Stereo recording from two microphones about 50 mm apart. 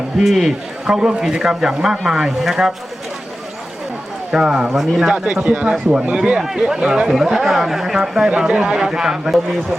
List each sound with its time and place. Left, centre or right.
0.3 s a man's voice: centre
4.3 s a man's voice: centre
6.4 s a man's voice: centre
8.3 s a man's voice: centre